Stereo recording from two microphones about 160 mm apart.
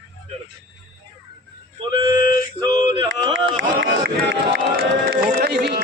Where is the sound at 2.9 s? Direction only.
25° right (ahead or behind).